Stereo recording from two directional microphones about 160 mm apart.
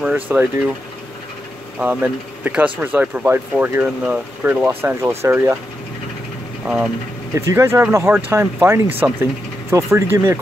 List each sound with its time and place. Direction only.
0.0 s speech: 10° right (ahead or behind)
1.8 s speech: 10° right (ahead or behind)
6.6 s speech: 5° right (ahead or behind)
7.3 s speech: 15° right (ahead or behind)